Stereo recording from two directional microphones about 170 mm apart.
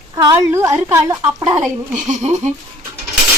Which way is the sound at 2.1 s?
45° right (ahead or behind).